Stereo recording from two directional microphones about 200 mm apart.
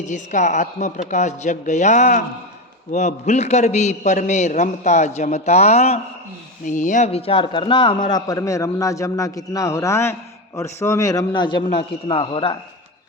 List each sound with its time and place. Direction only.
0.0 s a man's voice: 40° left (ahead or behind)